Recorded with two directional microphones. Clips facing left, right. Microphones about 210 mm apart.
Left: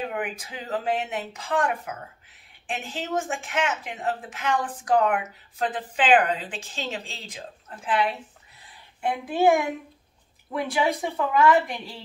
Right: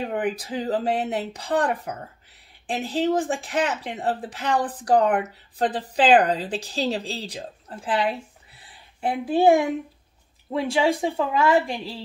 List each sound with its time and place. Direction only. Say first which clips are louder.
0.1 s speech: right 6 dB; 35° right (ahead or behind)
8.5 s a sound: right 3 dB; 30° right (ahead or behind)
10.5 s a woman's voice: right 3 dB; 30° right (ahead or behind)